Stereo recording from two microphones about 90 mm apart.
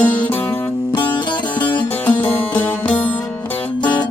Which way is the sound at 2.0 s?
20° left (ahead or behind).